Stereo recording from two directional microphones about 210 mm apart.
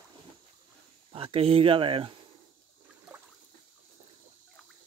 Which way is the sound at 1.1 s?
25° right (ahead or behind).